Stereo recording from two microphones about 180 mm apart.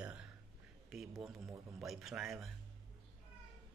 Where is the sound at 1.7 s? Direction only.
Centre (ahead or behind).